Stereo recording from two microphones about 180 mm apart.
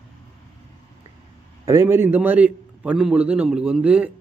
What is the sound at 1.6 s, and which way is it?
Speech, 15° right (ahead or behind).